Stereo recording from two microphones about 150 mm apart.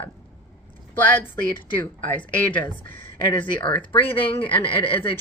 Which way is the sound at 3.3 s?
35° left (ahead or behind).